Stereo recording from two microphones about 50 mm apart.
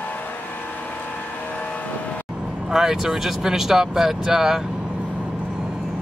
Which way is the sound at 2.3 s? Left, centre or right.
Centre.